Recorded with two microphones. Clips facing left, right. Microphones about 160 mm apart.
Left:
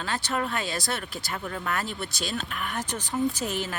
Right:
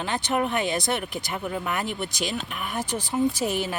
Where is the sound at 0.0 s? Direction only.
20° right (ahead or behind).